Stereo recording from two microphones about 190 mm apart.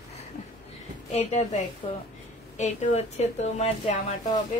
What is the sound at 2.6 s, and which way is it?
A woman's voice, 35° left (ahead or behind).